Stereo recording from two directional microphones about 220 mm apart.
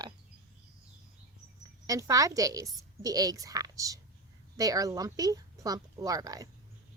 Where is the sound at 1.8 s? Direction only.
15° right (ahead or behind).